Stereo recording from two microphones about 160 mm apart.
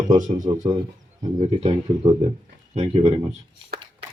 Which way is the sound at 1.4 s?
40° right (ahead or behind).